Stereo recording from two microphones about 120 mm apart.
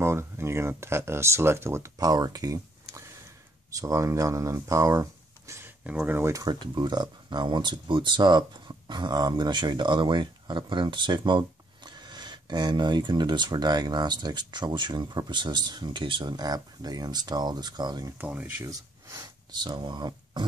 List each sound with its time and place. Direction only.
0.0 s speech: 20° right (ahead or behind)
5.5 s a sound: 25° right (ahead or behind)
5.9 s speech: 15° right (ahead or behind)
6.4 s speech: 40° right (ahead or behind)
18.1 s speech: 15° right (ahead or behind)
18.7 s speech: 30° right (ahead or behind)